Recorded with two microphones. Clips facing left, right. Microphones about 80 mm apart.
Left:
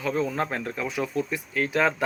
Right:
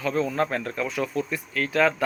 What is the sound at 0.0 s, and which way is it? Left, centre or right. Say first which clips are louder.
Speech: right 2 dB; centre.